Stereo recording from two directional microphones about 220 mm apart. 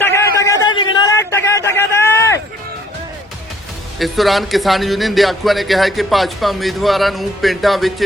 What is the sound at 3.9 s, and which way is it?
A man's voice, centre (ahead or behind).